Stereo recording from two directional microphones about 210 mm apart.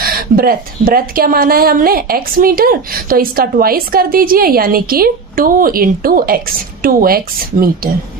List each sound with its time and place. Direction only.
0.0 s a woman's voice: 45° right (ahead or behind)